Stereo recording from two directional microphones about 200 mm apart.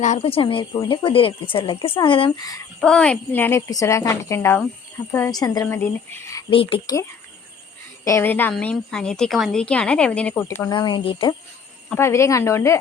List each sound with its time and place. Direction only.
0.0 s speech: 35° left (ahead or behind)
2.8 s a woman's voice: 5° left (ahead or behind)
6.5 s speech: 30° left (ahead or behind)
8.0 s a woman's voice: 15° left (ahead or behind)
10.7 s speech: 25° left (ahead or behind)
11.9 s a woman's voice: 15° left (ahead or behind)